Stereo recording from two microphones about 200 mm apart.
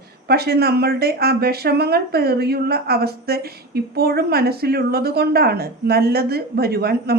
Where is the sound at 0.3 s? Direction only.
50° right (ahead or behind).